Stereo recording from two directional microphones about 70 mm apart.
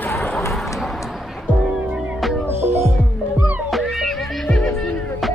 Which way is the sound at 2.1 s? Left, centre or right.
Centre.